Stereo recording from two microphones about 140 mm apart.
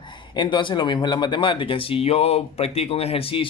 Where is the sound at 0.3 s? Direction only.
35° left (ahead or behind).